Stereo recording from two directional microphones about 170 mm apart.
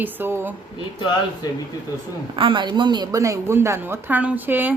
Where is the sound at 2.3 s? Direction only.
30° right (ahead or behind); by 4.7 s 10° right (ahead or behind).